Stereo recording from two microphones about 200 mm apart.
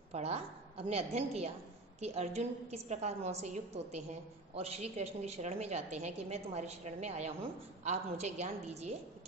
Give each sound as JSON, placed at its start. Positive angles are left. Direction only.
{"t": 0.1, "sound": "a woman's voice", "side_deg": -30}